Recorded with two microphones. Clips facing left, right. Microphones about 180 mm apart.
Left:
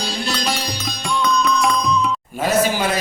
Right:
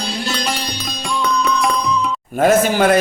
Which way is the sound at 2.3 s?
55° right (ahead or behind).